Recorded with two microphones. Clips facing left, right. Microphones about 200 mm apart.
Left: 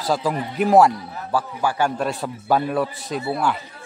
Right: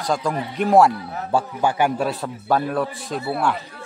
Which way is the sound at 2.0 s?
Centre (ahead or behind).